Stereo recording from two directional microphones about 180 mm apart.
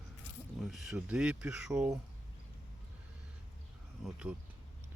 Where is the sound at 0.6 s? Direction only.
Centre (ahead or behind).